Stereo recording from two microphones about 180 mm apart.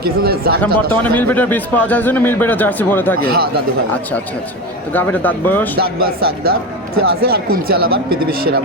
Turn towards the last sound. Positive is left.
turn(degrees=-55)  # may be behind; listen again after turning